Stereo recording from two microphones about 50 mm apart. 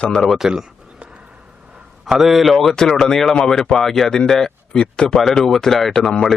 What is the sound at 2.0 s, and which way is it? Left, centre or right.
A man's voice, centre.